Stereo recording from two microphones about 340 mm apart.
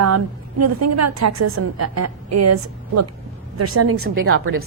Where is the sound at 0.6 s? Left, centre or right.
Right.